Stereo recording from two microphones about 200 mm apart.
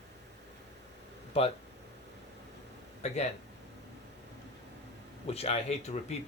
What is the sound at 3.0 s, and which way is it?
Speech, 35° left (ahead or behind).